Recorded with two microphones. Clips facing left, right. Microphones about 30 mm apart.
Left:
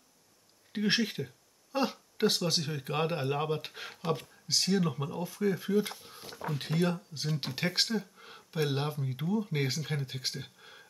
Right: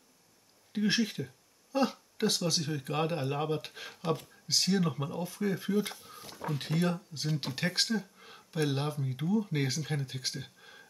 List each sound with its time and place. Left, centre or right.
0.7 s speech: left
4.5 s speech: centre
5.9 s a sound: left
6.2 s speech: centre